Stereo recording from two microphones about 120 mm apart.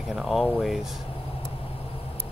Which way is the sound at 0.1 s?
Centre (ahead or behind).